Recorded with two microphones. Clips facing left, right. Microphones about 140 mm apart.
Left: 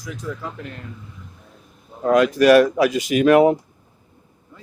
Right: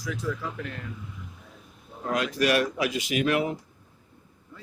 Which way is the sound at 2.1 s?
50° left (ahead or behind).